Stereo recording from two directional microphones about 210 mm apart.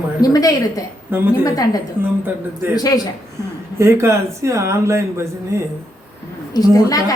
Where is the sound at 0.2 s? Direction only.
15° left (ahead or behind).